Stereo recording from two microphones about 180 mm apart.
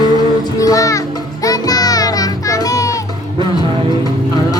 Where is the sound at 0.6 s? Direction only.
20° left (ahead or behind).